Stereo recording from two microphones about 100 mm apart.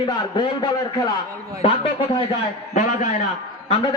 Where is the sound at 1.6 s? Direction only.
70° left (ahead or behind).